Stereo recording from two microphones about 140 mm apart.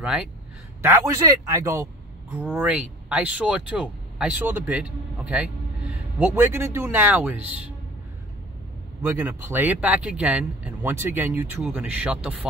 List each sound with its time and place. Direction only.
0.0 s a man's voice: 5° right (ahead or behind)
0.8 s speech: 20° right (ahead or behind)
2.3 s speech: 10° right (ahead or behind)
9.0 s speech: 15° right (ahead or behind)